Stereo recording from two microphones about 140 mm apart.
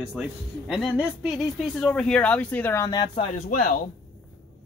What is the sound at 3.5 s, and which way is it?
Speech, 75° left (ahead or behind).